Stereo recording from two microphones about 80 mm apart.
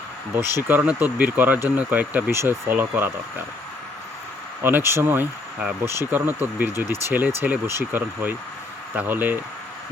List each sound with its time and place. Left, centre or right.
0.3 s speech: right
4.6 s speech: right